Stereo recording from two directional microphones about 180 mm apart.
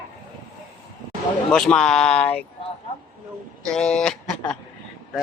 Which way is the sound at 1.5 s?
5° left (ahead or behind).